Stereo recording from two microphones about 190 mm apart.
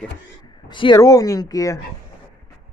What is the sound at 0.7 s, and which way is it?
Speech, 25° left (ahead or behind).